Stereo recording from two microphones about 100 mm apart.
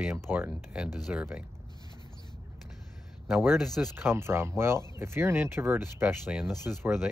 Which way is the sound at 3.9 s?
25° right (ahead or behind).